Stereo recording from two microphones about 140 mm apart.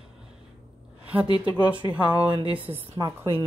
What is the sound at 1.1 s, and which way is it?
Speech, 10° right (ahead or behind).